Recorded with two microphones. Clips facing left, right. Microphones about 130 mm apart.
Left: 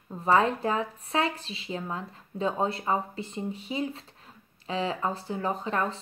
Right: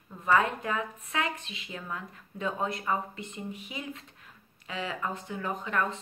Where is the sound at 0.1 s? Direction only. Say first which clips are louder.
Left 3 dB; 30° left (ahead or behind).